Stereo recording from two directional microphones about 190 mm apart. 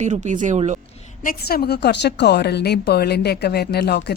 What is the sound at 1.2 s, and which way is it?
A woman's voice, 55° left (ahead or behind).